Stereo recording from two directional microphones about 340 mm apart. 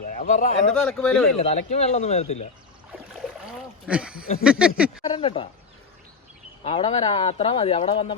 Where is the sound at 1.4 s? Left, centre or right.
Centre.